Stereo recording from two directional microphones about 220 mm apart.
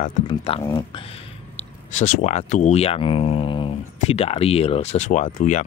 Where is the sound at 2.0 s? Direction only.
35° left (ahead or behind).